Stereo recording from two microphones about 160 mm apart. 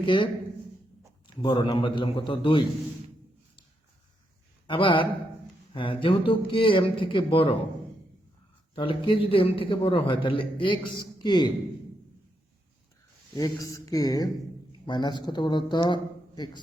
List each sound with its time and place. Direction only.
0.0 s speech: 30° left (ahead or behind)
1.4 s speech: 30° left (ahead or behind)
4.6 s speech: 30° left (ahead or behind)
8.7 s speech: 30° left (ahead or behind)
13.3 s speech: 20° left (ahead or behind)